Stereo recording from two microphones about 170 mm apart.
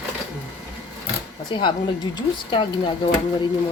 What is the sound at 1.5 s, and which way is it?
Speech, 25° left (ahead or behind).